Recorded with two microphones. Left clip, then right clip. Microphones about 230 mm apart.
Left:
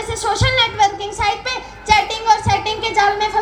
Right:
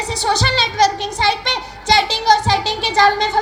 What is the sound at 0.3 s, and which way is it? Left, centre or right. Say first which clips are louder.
Speech: right 1 dB; centre.